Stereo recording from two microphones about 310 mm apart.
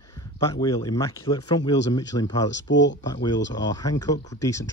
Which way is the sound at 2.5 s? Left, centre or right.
Left.